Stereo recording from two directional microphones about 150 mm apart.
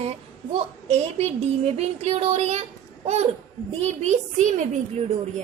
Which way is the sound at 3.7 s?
50° right (ahead or behind).